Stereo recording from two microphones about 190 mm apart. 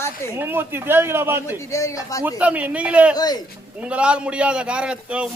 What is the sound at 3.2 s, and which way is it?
Speech, 20° left (ahead or behind).